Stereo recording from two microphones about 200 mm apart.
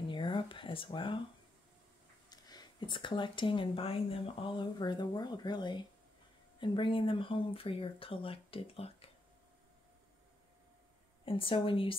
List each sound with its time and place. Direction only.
0.1 s a sound: 25° left (ahead or behind)
2.2 s speech: 20° left (ahead or behind)
11.2 s speech: 25° left (ahead or behind)